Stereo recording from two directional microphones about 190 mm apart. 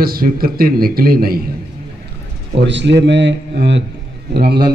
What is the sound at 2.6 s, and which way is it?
A man's voice, 70° right (ahead or behind).